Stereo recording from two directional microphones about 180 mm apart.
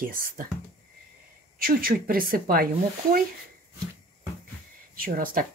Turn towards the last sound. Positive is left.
turn(degrees=-55)  # may be behind; listen again after turning